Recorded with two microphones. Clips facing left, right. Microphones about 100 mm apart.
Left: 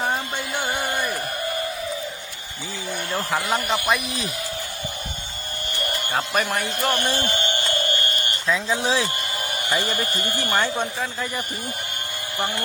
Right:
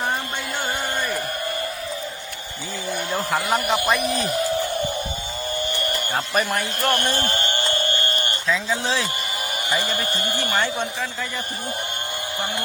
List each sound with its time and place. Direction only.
2.9 s speech: 5° right (ahead or behind)
6.1 s speech: centre (ahead or behind); by 7.3 s 15° left (ahead or behind)
7.3 s a sound: 40° right (ahead or behind)
8.4 s speech: 15° left (ahead or behind)
9.6 s a man's voice: 15° right (ahead or behind)
10.5 s speech: 15° left (ahead or behind)